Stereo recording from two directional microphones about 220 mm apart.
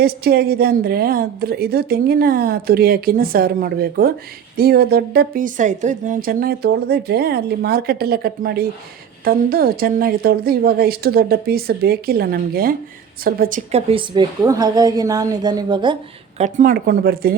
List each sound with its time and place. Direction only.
0.0 s a woman's voice: 45° right (ahead or behind)
13.7 s a woman's voice: 25° right (ahead or behind)
16.4 s speech: 35° right (ahead or behind)